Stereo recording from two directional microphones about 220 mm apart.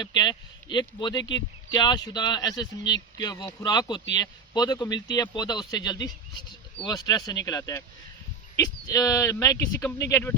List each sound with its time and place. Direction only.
0.0 s speech: 20° left (ahead or behind)